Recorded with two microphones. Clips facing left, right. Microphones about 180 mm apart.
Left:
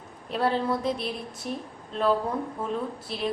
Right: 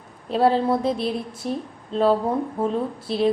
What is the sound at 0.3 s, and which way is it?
A woman's voice, 30° right (ahead or behind).